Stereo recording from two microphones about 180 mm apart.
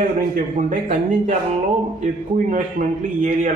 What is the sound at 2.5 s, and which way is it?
Speech, 45° right (ahead or behind).